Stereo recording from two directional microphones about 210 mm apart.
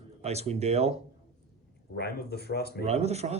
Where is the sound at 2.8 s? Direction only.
30° right (ahead or behind).